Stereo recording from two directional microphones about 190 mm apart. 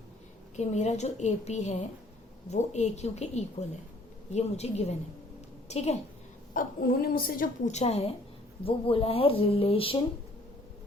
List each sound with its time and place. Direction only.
0.5 s a woman's voice: 35° left (ahead or behind)
6.5 s a woman's voice: 45° left (ahead or behind); by 10.0 s 30° left (ahead or behind)